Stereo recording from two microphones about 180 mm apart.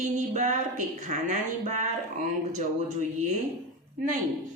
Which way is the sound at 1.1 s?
40° right (ahead or behind).